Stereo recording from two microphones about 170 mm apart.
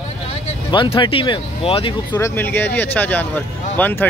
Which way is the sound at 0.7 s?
30° left (ahead or behind).